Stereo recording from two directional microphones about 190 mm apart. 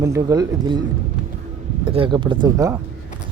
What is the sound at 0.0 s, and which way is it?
Speech, 15° right (ahead or behind).